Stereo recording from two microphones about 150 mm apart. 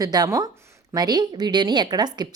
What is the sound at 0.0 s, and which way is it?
A woman's voice, 25° right (ahead or behind).